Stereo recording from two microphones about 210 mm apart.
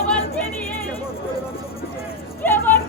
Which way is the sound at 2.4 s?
10° left (ahead or behind).